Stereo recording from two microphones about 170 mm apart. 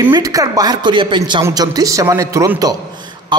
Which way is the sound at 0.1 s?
20° right (ahead or behind).